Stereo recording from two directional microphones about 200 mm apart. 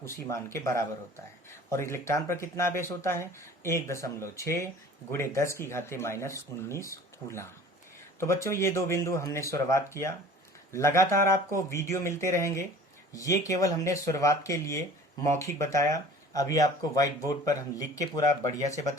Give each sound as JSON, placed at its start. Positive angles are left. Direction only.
{"t": 0.0, "sound": "speech", "side_deg": 15}